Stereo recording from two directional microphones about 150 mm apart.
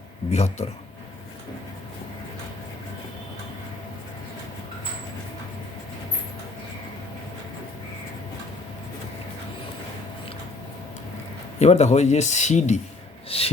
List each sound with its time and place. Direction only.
0.3 s speech: 45° left (ahead or behind)
11.6 s speech: 50° left (ahead or behind)
13.3 s a sound: 40° left (ahead or behind)